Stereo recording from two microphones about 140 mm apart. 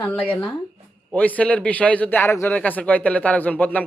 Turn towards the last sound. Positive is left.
turn(degrees=10)  # may be behind; listen again after turning